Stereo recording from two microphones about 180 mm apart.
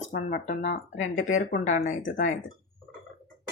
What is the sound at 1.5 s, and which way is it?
Speech, 40° left (ahead or behind).